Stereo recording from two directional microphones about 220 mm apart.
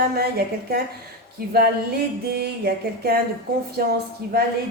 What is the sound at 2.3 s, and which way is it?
Speech, 45° right (ahead or behind).